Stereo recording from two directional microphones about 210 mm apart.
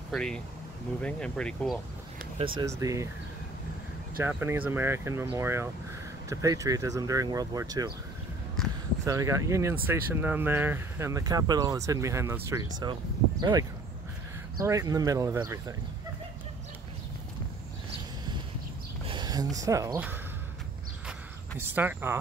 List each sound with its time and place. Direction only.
0.1 s speech: 5° left (ahead or behind)
2.3 s speech: 25° right (ahead or behind)
4.2 s speech: 10° right (ahead or behind)
9.0 s speech: 15° right (ahead or behind)
19.0 s speech: 20° right (ahead or behind)
21.5 s speech: 10° right (ahead or behind)